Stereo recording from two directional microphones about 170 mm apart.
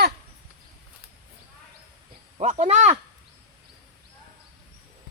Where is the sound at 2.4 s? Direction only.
40° right (ahead or behind).